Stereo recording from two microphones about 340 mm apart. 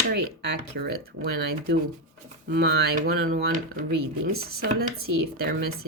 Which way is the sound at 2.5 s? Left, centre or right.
Right.